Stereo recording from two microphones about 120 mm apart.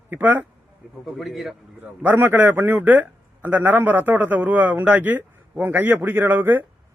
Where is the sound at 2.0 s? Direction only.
15° right (ahead or behind).